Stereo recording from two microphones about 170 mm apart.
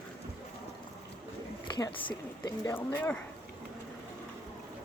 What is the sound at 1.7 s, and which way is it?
Speech, 20° left (ahead or behind).